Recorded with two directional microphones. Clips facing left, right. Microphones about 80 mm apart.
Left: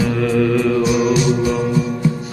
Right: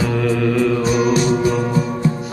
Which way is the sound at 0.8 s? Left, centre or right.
Right.